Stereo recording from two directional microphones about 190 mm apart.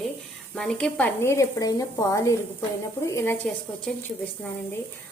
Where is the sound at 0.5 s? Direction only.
5° left (ahead or behind).